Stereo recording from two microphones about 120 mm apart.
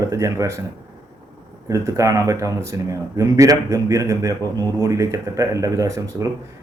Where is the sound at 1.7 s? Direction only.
25° right (ahead or behind).